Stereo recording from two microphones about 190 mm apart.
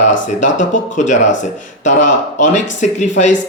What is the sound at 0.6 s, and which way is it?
Speech, 40° left (ahead or behind).